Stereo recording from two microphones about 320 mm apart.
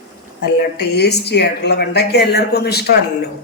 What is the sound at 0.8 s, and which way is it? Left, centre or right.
A woman's voice, left.